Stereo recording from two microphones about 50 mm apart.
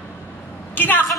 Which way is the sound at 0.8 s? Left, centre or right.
Left.